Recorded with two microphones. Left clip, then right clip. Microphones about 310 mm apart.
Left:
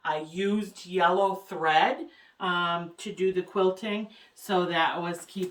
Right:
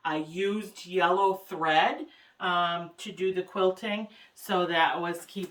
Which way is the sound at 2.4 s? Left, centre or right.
Centre.